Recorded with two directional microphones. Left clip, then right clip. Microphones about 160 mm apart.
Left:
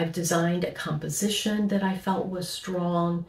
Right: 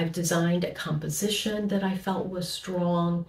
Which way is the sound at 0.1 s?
20° left (ahead or behind).